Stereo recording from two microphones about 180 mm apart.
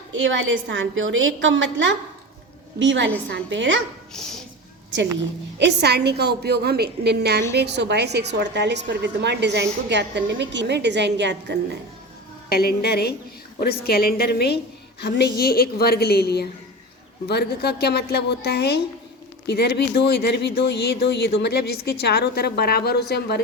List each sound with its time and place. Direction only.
0.1 s a woman's voice: 90° right
4.1 s speech: 5° left (ahead or behind)
5.5 s a woman's voice: 70° right (ahead or behind)
12.5 s a woman's voice: 60° left (ahead or behind)